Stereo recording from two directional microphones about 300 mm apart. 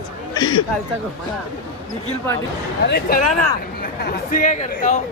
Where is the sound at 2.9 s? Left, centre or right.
Left.